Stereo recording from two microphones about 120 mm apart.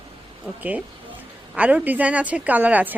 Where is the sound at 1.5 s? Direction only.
10° right (ahead or behind).